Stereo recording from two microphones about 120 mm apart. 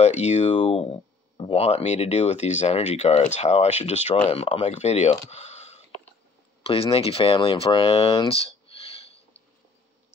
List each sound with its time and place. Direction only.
0.0 s speech: 70° left (ahead or behind)
4.3 s speech: 55° left (ahead or behind)
6.6 s speech: 55° left (ahead or behind)
8.3 s a sound: 55° left (ahead or behind)